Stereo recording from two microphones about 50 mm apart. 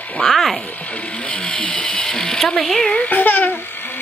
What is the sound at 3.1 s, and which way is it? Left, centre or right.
Babbling, left.